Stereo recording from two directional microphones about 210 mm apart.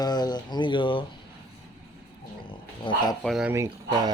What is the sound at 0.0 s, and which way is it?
Speech, 20° left (ahead or behind).